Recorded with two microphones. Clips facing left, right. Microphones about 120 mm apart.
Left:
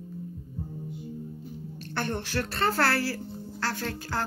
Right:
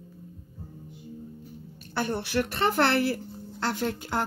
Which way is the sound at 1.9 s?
10° right (ahead or behind).